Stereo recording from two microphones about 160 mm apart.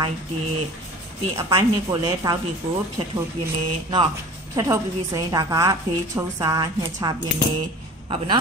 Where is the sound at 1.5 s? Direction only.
25° right (ahead or behind).